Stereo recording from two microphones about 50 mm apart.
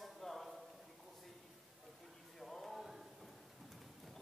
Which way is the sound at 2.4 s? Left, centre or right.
Centre.